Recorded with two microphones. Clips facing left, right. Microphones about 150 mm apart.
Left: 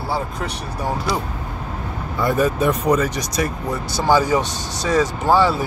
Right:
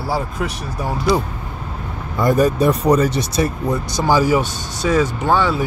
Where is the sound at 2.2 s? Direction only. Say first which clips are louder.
Right 3 dB; 40° right (ahead or behind).